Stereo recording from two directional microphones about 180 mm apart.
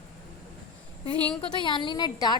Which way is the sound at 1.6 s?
25° left (ahead or behind).